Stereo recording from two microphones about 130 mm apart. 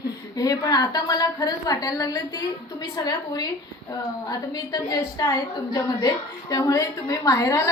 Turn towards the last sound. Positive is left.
turn(degrees=25)  # may be behind; listen again after turning